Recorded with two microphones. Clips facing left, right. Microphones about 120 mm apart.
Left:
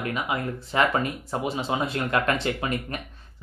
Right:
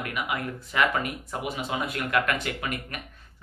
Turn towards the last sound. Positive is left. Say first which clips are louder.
# left 4 dB
turn(degrees=30)  # may be behind; listen again after turning